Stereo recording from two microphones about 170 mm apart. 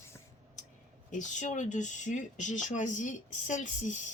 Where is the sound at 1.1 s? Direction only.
45° left (ahead or behind).